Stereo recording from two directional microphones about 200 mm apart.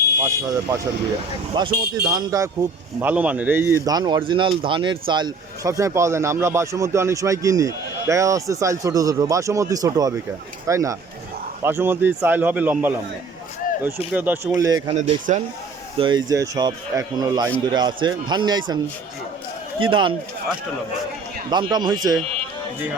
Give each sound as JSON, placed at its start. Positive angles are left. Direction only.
{"t": 0.2, "sound": "speech", "side_deg": -15}
{"t": 14.1, "sound": "speech", "side_deg": -10}
{"t": 14.8, "sound": "speech", "side_deg": -35}
{"t": 16.0, "sound": "speech", "side_deg": -20}
{"t": 19.8, "sound": "speech", "side_deg": -25}
{"t": 21.5, "sound": "speech", "side_deg": -20}